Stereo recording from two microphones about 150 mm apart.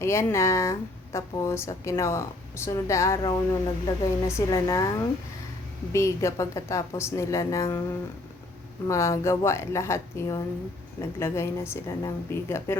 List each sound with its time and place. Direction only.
0.0 s speech: 20° left (ahead or behind)
8.9 s a woman's voice: 20° left (ahead or behind)